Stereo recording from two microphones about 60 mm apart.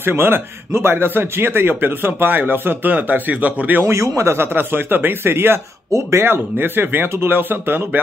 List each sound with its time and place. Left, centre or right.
0.0 s speech: right
3.8 s a man's voice: right
4.2 s speech: right
5.9 s speech: right
6.2 s speech: right